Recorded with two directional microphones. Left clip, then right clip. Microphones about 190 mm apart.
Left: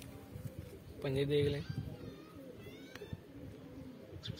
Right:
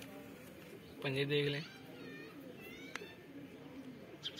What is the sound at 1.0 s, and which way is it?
Speech, 40° left (ahead or behind).